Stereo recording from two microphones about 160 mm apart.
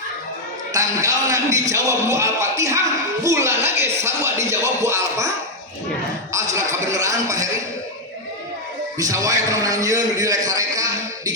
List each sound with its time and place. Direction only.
0.7 s music: 20° right (ahead or behind)
3.2 s speech: 15° right (ahead or behind)
6.3 s music: 20° right (ahead or behind)
9.0 s music: 20° right (ahead or behind)